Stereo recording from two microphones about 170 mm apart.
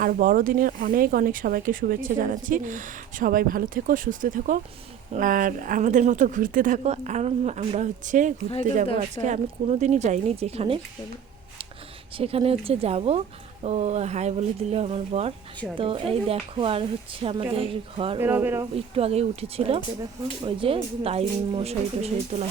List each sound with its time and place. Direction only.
0.0 s a woman's voice: 55° right (ahead or behind); by 10.8 s 35° right (ahead or behind)
12.1 s a woman's voice: 35° right (ahead or behind)
18.2 s speech: 10° right (ahead or behind)
18.9 s a woman's voice: 35° right (ahead or behind)